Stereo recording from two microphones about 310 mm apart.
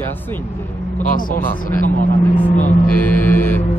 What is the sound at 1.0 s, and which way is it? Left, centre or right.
Speech, left.